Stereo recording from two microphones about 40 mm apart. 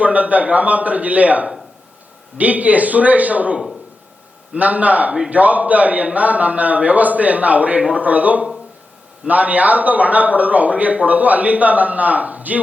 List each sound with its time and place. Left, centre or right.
0.0 s speech: right